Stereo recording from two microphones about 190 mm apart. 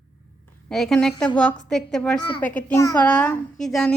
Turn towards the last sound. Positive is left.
turn(degrees=0)  # may be behind; listen again after turning